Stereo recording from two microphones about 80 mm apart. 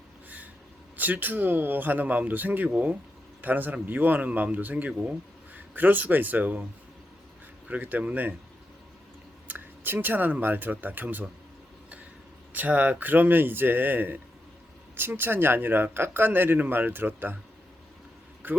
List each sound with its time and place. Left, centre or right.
0.9 s speech: right
7.7 s speech: right
9.5 s speech: right
12.5 s speech: centre
18.4 s speech: right